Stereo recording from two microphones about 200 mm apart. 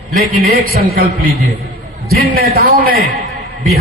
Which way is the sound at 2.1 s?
50° right (ahead or behind).